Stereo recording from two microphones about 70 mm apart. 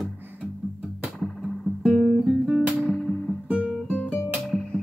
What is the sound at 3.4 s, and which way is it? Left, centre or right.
Guitar, centre.